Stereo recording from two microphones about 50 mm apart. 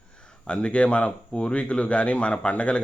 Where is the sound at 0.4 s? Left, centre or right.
Left.